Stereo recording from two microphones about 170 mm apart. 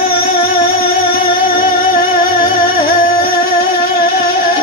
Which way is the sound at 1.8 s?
60° left (ahead or behind).